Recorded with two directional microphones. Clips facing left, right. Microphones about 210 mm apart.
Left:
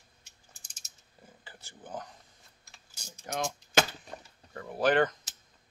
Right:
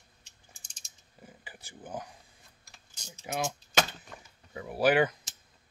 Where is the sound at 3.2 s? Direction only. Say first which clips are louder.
Right 1 dB; 5° right (ahead or behind).